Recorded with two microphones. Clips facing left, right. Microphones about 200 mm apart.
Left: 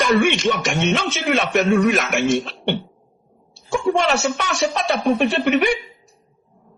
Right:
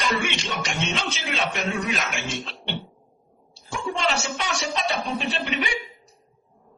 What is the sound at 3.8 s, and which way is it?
A man's voice, 55° left (ahead or behind).